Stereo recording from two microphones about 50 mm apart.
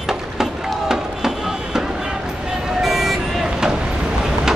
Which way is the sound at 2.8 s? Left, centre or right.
Centre.